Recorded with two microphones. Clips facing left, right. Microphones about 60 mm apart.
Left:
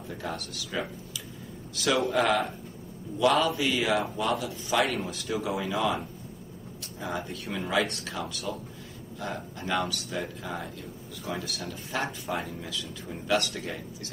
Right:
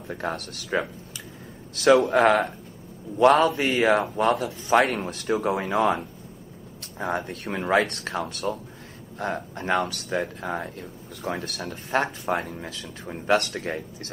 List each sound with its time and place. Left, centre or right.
0.1 s speech: right
3.6 s speech: right